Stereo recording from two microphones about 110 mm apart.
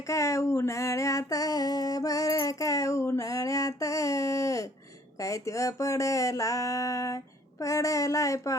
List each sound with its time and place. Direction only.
0.1 s music: 30° left (ahead or behind)
5.2 s speech: 30° left (ahead or behind)